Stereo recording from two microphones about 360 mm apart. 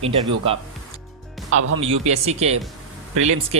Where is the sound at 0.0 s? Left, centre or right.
Centre.